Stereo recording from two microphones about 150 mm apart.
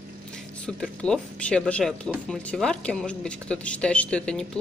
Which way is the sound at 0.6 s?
5° left (ahead or behind).